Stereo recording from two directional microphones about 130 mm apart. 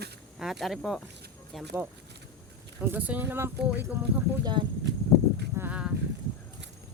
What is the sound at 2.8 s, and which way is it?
Speech, 15° right (ahead or behind).